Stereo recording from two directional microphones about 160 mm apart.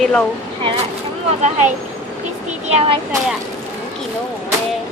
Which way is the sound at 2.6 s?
45° right (ahead or behind).